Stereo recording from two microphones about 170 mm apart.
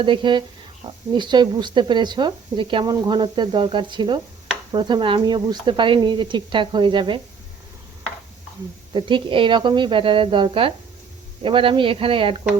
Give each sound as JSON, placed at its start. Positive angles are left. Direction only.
{"t": 0.0, "sound": "speech", "side_deg": -30}
{"t": 8.9, "sound": "speech", "side_deg": -30}